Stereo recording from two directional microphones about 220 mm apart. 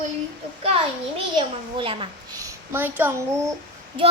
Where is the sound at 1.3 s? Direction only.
25° right (ahead or behind).